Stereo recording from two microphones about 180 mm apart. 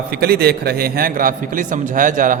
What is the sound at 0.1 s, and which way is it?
A man's voice, 60° right (ahead or behind).